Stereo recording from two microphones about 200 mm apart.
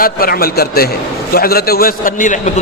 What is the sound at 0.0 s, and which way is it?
A man's voice, 45° left (ahead or behind).